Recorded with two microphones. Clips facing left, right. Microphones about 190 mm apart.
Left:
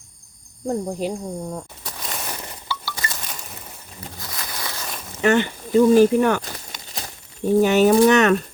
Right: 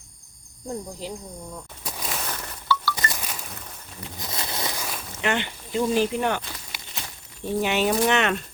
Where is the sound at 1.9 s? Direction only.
Centre (ahead or behind).